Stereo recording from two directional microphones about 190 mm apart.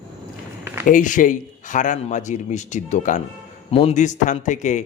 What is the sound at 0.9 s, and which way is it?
A man's voice, 45° left (ahead or behind).